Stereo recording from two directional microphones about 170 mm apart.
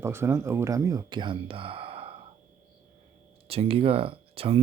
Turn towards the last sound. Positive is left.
turn(degrees=-35)  # may be behind; listen again after turning